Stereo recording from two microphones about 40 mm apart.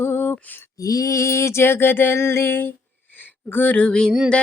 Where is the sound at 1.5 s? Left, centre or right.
Left.